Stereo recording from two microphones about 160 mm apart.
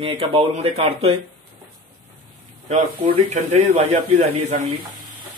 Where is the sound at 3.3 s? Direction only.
45° right (ahead or behind).